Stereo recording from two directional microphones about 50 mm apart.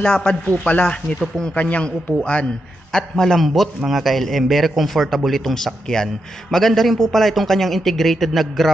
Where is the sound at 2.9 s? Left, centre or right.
Centre.